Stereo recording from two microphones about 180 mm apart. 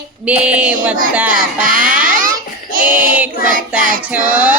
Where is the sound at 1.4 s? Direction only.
50° right (ahead or behind).